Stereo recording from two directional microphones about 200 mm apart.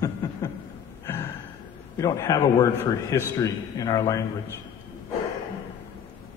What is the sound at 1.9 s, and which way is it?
A man's voice, 15° left (ahead or behind).